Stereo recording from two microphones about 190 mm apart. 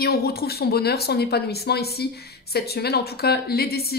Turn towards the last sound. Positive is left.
turn(degrees=55)  # may be behind; listen again after turning